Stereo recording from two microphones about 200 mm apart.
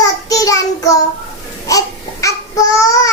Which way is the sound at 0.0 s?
15° left (ahead or behind).